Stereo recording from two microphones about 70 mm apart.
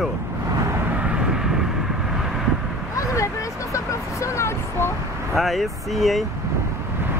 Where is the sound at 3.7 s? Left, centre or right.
Left.